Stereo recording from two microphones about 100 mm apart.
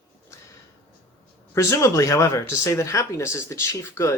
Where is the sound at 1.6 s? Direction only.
30° left (ahead or behind).